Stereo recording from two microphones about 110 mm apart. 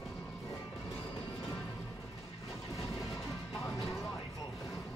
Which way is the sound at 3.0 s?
25° left (ahead or behind).